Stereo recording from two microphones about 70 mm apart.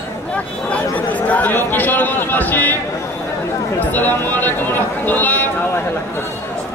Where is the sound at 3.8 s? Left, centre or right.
Left.